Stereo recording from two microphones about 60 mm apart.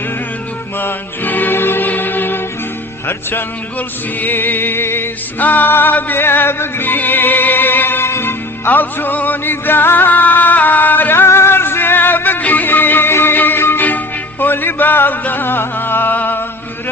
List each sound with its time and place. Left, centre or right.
0.8 s music: left
5.4 s music: left